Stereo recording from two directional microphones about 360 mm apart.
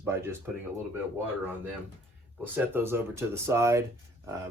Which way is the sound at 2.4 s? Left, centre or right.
Centre.